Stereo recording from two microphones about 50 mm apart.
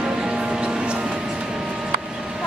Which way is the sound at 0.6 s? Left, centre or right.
Right.